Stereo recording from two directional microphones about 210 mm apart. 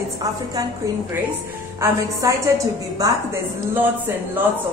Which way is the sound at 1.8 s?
15° right (ahead or behind).